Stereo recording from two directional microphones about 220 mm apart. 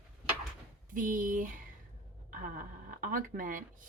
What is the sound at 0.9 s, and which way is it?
Speech, 35° right (ahead or behind).